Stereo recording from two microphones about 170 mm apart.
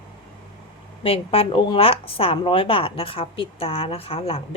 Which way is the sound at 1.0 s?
35° left (ahead or behind).